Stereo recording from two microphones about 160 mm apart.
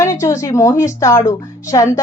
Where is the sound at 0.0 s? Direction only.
20° left (ahead or behind).